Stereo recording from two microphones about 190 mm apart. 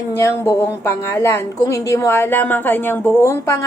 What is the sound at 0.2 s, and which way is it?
A woman's voice, 15° left (ahead or behind).